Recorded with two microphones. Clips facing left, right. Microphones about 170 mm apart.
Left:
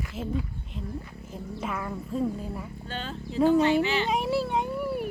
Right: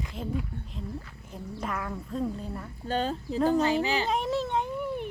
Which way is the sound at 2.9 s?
40° right (ahead or behind).